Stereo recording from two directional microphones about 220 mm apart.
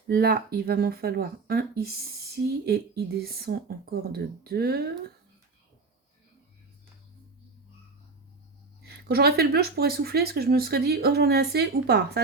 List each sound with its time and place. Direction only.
0.1 s speech: 45° right (ahead or behind)
8.8 s speech: 45° right (ahead or behind)